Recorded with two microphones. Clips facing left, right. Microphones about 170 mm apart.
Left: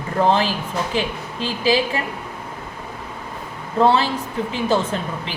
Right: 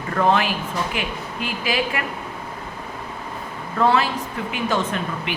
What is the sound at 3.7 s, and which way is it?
Speech, 30° left (ahead or behind).